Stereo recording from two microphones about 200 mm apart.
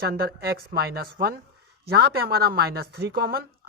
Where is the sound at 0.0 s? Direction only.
50° right (ahead or behind).